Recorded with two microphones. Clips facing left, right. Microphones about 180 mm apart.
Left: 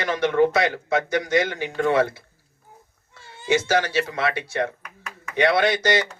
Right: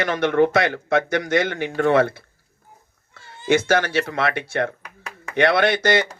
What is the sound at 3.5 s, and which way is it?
A man's voice, 55° right (ahead or behind).